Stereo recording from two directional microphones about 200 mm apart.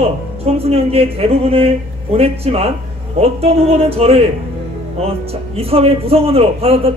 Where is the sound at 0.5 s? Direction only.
30° right (ahead or behind).